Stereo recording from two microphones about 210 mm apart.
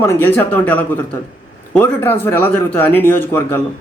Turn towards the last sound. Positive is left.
turn(degrees=10)  # may be behind; listen again after turning